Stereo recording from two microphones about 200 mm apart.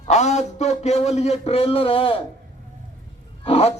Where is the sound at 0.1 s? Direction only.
35° left (ahead or behind).